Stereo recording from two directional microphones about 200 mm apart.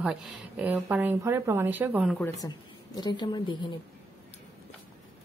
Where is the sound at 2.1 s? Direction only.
15° left (ahead or behind).